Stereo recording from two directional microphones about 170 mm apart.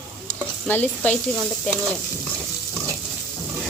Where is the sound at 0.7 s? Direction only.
10° left (ahead or behind).